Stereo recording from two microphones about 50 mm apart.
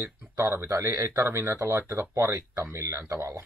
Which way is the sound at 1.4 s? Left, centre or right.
Right.